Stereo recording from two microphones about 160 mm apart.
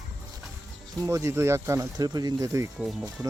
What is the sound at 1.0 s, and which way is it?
Speech, 20° right (ahead or behind).